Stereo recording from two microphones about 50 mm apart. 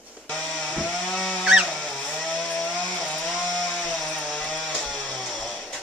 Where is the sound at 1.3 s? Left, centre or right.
Centre.